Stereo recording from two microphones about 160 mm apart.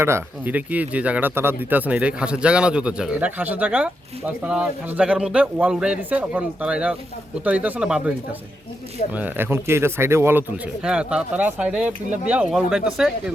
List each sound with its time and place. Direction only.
0.0 s speech: 15° right (ahead or behind)
9.1 s speech: 10° right (ahead or behind)